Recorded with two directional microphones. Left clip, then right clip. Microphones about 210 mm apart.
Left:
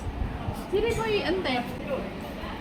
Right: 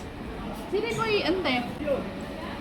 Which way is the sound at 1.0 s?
15° right (ahead or behind).